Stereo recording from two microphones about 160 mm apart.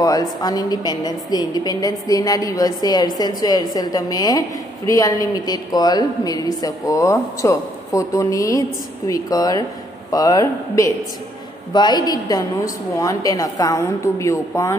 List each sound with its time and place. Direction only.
0.0 s a woman's voice: 25° left (ahead or behind)